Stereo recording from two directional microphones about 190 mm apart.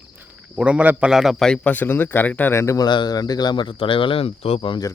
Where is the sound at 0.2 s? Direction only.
5° right (ahead or behind).